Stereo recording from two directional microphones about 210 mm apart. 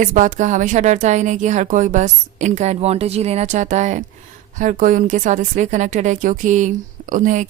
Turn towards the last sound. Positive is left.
turn(degrees=-35)  # may be behind; listen again after turning